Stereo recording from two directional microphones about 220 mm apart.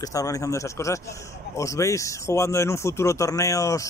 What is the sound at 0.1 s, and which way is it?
A man's voice, 15° left (ahead or behind).